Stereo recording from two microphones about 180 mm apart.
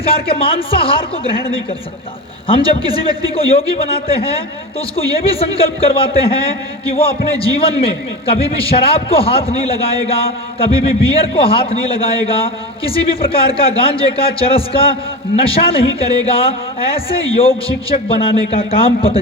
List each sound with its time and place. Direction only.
0.0 s a man's voice: 30° left (ahead or behind)
2.5 s a man's voice: 30° left (ahead or behind)